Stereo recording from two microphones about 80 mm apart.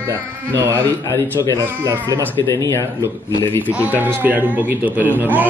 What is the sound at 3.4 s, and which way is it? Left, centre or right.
Speech, left.